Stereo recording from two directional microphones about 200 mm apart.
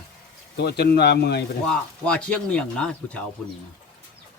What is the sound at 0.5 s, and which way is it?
Speech, 55° left (ahead or behind).